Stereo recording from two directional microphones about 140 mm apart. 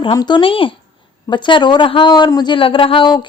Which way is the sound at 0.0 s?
35° left (ahead or behind).